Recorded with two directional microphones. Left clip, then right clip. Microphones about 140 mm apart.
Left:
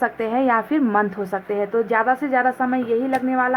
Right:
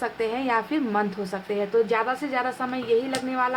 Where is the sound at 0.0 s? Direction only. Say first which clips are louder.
Left 6 dB; 35° left (ahead or behind).